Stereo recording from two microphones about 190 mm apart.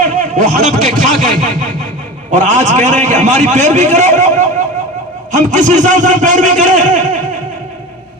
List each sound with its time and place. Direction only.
0.0 s a man's voice: 40° right (ahead or behind)